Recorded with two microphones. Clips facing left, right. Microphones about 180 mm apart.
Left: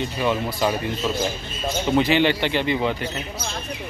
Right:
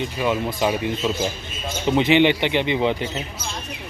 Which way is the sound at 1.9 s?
20° right (ahead or behind).